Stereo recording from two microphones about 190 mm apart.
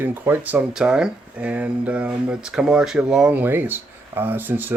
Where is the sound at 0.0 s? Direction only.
10° right (ahead or behind).